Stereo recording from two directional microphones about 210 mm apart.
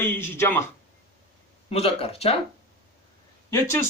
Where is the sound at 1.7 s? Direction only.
30° left (ahead or behind).